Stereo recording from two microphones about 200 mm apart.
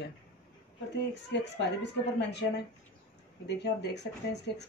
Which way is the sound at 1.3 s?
60° left (ahead or behind).